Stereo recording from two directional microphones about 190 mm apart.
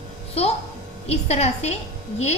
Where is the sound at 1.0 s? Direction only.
35° left (ahead or behind).